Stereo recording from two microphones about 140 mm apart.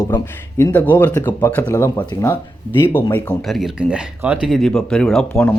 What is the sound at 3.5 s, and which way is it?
Speech, 5° right (ahead or behind).